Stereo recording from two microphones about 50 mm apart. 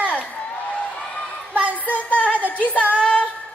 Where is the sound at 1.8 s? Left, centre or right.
Left.